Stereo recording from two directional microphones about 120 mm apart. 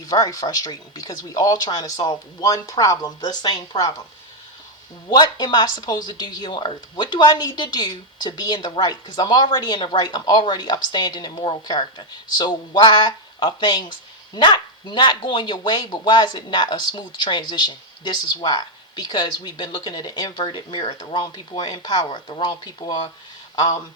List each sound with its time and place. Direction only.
0.1 s speech: 30° left (ahead or behind)
5.0 s speech: 35° left (ahead or behind)